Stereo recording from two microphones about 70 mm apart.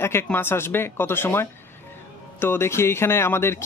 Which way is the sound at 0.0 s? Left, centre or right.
Left.